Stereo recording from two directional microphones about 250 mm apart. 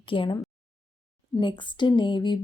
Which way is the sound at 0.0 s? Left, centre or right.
Centre.